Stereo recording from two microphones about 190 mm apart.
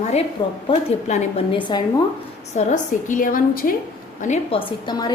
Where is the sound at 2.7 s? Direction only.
45° left (ahead or behind).